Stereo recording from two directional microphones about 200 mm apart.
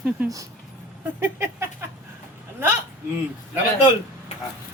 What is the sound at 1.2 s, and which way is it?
Speech, 10° right (ahead or behind).